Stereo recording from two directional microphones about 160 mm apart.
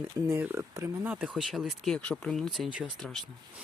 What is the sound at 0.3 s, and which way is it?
Speech, 15° right (ahead or behind).